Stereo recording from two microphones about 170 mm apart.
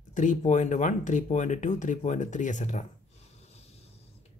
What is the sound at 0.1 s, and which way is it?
Speech, 50° left (ahead or behind).